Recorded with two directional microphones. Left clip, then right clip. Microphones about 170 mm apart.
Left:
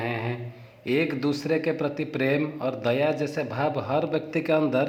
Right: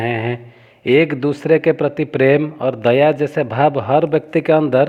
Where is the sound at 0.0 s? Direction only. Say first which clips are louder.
Right 9 dB; 50° right (ahead or behind).